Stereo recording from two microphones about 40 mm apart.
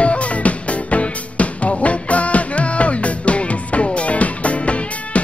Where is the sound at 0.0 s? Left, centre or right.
Left.